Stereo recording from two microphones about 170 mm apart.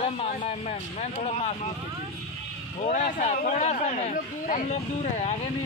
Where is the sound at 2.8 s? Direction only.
45° left (ahead or behind).